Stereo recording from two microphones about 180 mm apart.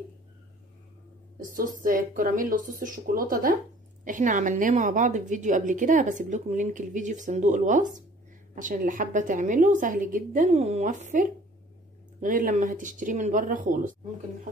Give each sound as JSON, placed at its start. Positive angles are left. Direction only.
{"t": 1.4, "sound": "a woman's voice", "side_deg": -50}